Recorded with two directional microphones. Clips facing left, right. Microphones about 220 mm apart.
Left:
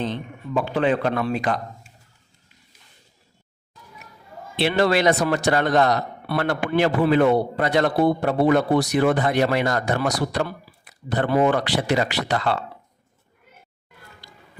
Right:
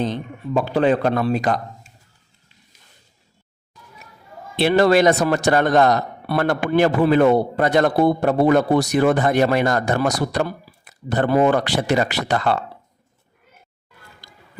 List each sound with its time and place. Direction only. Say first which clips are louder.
0.0 s speech: right 4 dB; 40° right (ahead or behind)
4.5 s speech: right 5 dB; 45° right (ahead or behind)